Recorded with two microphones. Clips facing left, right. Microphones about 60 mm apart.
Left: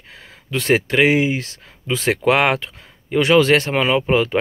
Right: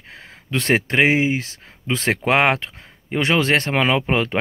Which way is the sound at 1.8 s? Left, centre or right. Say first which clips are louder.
Left 3 dB; right.